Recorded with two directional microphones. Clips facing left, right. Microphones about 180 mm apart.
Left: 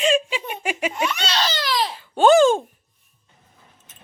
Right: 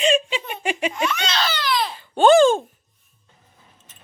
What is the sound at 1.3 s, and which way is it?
Baby cry, 35° left (ahead or behind).